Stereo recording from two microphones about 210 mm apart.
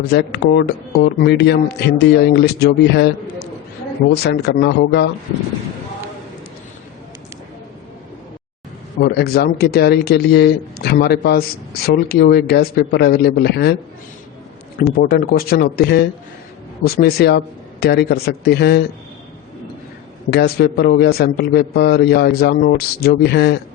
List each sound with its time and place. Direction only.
0.1 s speech: 55° left (ahead or behind)
9.0 s speech: 50° left (ahead or behind)
14.8 s speech: 45° left (ahead or behind)
20.3 s speech: 45° left (ahead or behind)